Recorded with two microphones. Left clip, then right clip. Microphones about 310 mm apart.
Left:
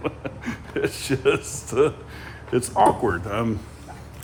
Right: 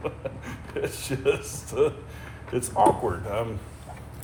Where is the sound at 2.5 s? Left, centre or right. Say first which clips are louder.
Left 4 dB; left.